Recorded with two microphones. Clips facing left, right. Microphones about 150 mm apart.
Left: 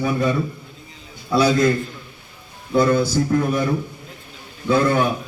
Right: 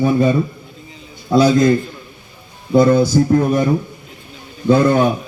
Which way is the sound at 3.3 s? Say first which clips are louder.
Right 3 dB; 40° right (ahead or behind).